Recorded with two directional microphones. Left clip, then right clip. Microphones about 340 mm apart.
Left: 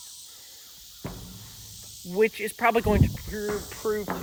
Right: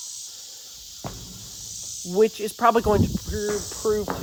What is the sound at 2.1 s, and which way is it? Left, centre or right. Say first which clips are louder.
Speech: right 3 dB; centre.